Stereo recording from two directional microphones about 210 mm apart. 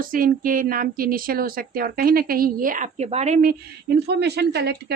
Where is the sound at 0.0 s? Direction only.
40° right (ahead or behind).